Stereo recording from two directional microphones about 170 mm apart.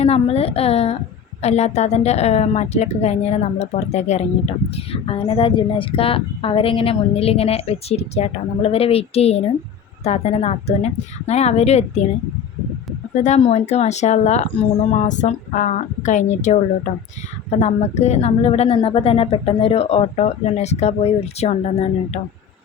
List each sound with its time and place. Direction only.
0.0 s speech: 35° left (ahead or behind)
13.1 s speech: 45° left (ahead or behind)
17.6 s speech: 40° left (ahead or behind)